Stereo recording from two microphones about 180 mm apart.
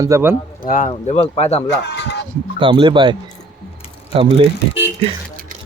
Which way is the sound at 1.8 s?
70° left (ahead or behind).